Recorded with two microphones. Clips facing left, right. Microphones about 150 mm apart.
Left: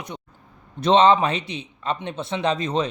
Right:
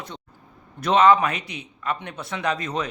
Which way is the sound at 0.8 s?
25° left (ahead or behind).